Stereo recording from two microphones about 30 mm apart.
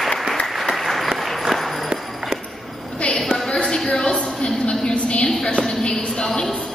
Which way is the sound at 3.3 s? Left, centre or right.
Centre.